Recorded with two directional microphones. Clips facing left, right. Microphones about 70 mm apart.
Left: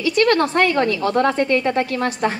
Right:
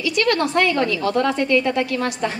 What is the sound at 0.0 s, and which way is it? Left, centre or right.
A woman's voice, left.